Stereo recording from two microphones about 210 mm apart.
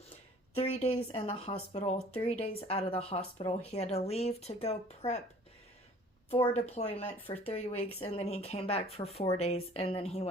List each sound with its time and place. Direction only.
0.5 s speech: 30° left (ahead or behind)
6.3 s speech: 30° left (ahead or behind)